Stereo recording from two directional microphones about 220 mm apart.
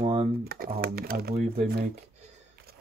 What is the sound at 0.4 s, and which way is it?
Typing, 45° right (ahead or behind).